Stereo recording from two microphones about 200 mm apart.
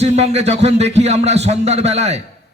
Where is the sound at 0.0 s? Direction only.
35° right (ahead or behind).